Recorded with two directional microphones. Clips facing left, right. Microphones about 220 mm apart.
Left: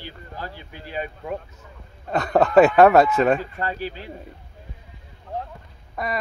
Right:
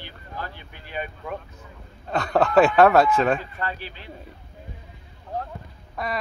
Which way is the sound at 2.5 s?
5° left (ahead or behind).